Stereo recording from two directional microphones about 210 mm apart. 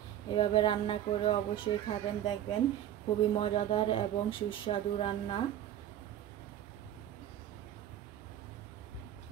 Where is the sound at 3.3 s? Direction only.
25° left (ahead or behind).